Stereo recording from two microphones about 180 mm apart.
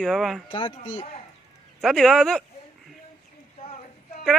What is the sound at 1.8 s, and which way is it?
Speech, 5° left (ahead or behind).